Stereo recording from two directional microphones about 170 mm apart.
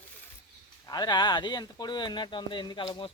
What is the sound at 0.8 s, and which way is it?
Speech, 25° left (ahead or behind).